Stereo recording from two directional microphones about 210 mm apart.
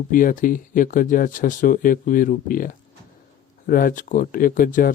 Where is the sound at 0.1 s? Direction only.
40° left (ahead or behind).